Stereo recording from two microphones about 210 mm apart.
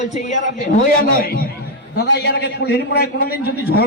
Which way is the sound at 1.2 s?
45° left (ahead or behind).